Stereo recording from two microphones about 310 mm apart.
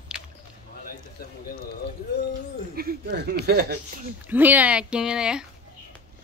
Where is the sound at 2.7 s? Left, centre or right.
Right.